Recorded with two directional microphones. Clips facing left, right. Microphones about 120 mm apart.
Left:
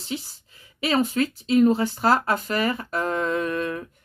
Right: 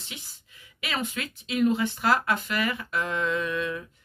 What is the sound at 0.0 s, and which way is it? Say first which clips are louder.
Speech: left 13 dB; 35° left (ahead or behind).